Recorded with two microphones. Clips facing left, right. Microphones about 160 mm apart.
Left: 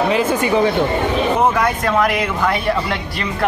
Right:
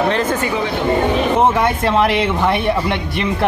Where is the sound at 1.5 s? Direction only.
25° right (ahead or behind).